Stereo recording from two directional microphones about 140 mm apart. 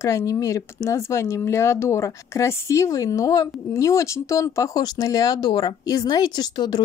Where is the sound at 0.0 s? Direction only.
20° left (ahead or behind).